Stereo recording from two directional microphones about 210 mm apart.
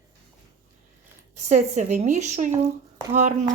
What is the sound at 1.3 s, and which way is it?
A woman's voice, 35° right (ahead or behind).